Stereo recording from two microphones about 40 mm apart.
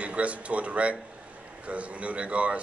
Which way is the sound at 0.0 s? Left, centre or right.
Right.